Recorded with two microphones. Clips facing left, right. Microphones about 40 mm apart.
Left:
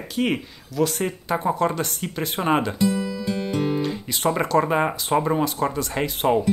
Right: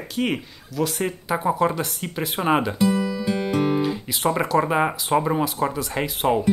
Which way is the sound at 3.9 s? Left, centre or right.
Centre.